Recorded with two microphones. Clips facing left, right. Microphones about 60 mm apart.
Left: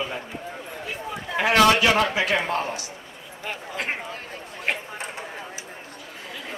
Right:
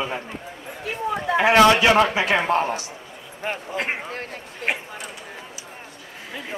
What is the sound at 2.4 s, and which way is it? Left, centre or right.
A man's voice, right.